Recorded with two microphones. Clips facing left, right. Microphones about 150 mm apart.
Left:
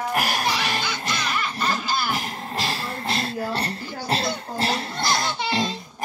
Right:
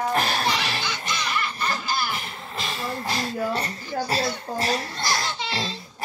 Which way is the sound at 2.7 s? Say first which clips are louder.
Right 1 dB; 65° left (ahead or behind).